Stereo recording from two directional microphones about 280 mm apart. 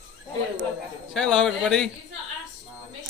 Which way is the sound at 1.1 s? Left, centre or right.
Centre.